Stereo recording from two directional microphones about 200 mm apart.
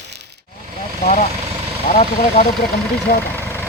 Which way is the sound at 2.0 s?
35° left (ahead or behind).